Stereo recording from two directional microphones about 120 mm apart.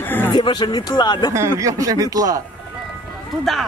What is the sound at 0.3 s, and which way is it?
Speech, 40° left (ahead or behind).